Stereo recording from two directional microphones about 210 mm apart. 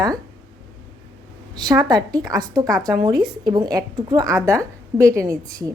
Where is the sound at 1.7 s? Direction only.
15° right (ahead or behind).